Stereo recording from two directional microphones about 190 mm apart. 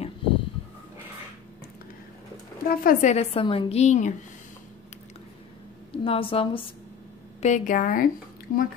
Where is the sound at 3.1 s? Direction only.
30° left (ahead or behind).